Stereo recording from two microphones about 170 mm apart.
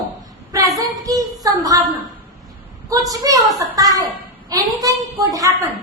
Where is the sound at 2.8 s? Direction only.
20° right (ahead or behind).